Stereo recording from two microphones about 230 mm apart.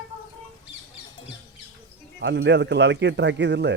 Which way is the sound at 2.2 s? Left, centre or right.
Right.